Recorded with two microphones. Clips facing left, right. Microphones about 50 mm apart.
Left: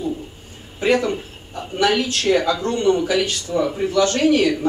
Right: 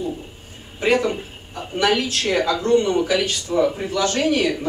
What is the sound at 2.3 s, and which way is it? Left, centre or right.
A man's voice, centre.